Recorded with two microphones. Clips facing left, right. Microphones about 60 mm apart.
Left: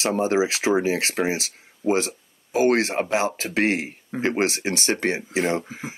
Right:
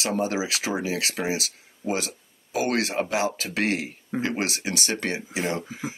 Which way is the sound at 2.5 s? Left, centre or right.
Left.